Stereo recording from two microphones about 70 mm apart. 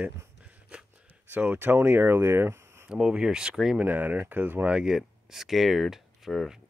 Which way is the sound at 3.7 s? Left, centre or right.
Right.